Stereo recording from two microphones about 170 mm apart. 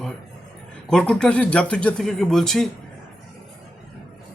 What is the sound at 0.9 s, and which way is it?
A man's voice, 5° left (ahead or behind).